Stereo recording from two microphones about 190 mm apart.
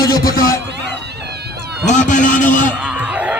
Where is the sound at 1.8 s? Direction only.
40° left (ahead or behind).